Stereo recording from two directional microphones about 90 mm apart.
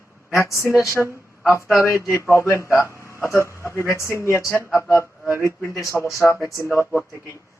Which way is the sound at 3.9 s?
30° left (ahead or behind).